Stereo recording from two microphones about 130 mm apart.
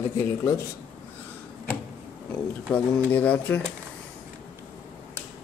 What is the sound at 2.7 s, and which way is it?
Speech, 10° left (ahead or behind).